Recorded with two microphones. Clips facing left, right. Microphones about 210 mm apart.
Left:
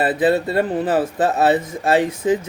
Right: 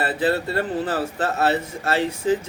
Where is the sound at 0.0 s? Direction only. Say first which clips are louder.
Left 5 dB; 20° left (ahead or behind).